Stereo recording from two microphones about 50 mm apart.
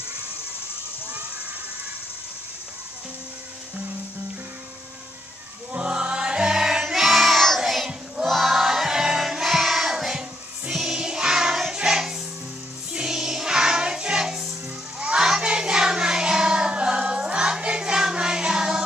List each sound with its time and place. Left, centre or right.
5.7 s music: right
15.0 s music: centre